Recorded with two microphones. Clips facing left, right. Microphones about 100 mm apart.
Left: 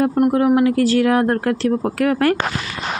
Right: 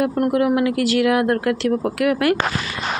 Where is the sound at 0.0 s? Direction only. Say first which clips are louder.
Left 2 dB; 30° left (ahead or behind).